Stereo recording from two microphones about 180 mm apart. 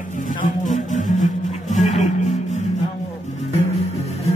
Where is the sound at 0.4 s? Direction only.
45° left (ahead or behind).